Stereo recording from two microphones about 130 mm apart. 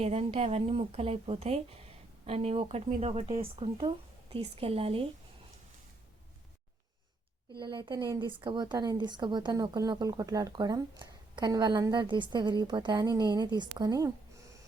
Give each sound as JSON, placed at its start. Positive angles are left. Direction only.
{"t": 0.0, "sound": "a woman's voice", "side_deg": -55}
{"t": 7.6, "sound": "a woman's voice", "side_deg": -35}